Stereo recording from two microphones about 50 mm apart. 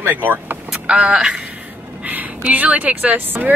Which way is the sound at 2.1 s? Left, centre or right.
Right.